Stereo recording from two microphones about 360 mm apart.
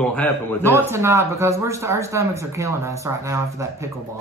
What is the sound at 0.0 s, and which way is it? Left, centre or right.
Speech, centre.